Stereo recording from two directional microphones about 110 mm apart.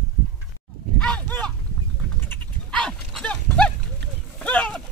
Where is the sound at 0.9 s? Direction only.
10° left (ahead or behind).